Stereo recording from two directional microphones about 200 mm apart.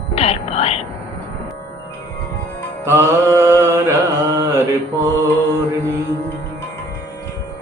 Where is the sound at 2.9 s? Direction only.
15° right (ahead or behind).